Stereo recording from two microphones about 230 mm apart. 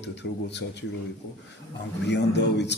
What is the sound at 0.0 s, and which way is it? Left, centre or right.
Speech, left.